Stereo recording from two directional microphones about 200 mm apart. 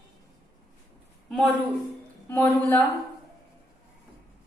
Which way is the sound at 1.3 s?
Centre (ahead or behind).